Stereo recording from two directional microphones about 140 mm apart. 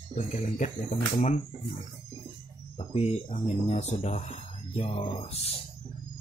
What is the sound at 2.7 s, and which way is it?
Speech, 45° left (ahead or behind).